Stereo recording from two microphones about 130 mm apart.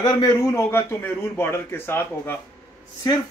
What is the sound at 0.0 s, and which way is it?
A man's voice, 30° left (ahead or behind).